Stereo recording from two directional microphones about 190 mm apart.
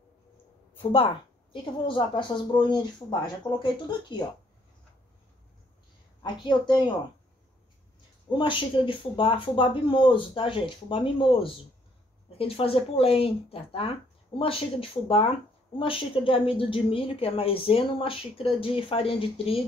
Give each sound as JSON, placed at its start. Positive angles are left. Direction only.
{"t": 0.9, "sound": "a woman's voice", "side_deg": 25}
{"t": 6.4, "sound": "a woman's voice", "side_deg": 25}
{"t": 8.4, "sound": "a woman's voice", "side_deg": 25}